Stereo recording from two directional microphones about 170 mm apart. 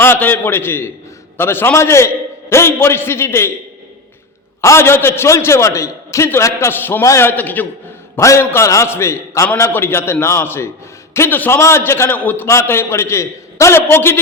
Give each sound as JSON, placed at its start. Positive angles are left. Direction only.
{"t": 0.0, "sound": "a man's voice", "side_deg": 10}
{"t": 4.6, "sound": "a man's voice", "side_deg": 15}